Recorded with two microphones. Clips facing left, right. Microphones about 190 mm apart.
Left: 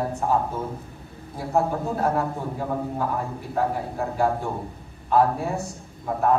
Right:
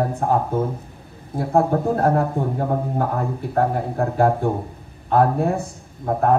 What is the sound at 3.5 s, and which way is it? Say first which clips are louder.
Speech: right 4 dB; 55° right (ahead or behind).